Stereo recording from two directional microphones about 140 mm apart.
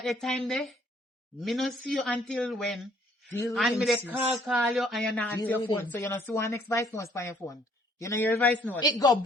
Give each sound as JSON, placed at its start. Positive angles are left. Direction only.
{"t": 0.0, "sound": "speech", "side_deg": 0}
{"t": 4.0, "sound": "speech", "side_deg": -15}
{"t": 4.4, "sound": "a man's voice", "side_deg": 0}
{"t": 8.8, "sound": "speech", "side_deg": 25}